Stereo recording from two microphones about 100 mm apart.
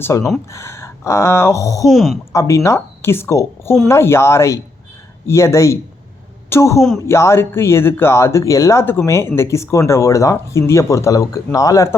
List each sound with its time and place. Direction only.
0.0 s speech: 30° left (ahead or behind)
1.9 s speech: centre (ahead or behind)
2.3 s speech: 30° left (ahead or behind)